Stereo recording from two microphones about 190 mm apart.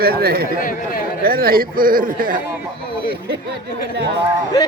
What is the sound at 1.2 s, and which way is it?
A man's voice, 50° right (ahead or behind).